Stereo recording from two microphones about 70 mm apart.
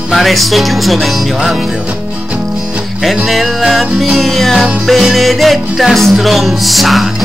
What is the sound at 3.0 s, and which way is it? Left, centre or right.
Music, centre.